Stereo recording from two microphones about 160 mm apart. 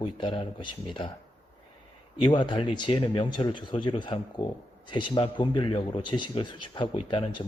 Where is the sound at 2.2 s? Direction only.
25° left (ahead or behind).